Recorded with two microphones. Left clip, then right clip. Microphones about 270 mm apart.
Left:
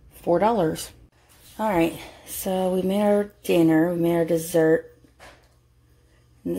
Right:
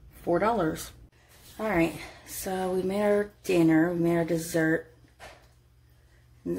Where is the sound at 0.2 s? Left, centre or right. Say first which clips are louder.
Left 5 dB; left.